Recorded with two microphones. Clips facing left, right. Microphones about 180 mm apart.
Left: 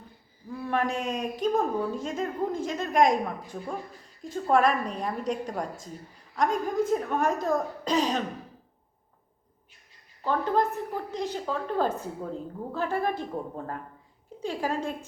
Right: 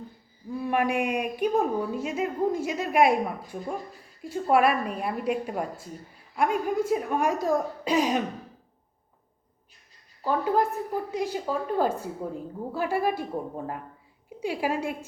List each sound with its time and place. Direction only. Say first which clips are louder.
0.6 s a woman's voice: right 3 dB; 15° right (ahead or behind)
10.2 s a woman's voice: right 1 dB; 10° right (ahead or behind)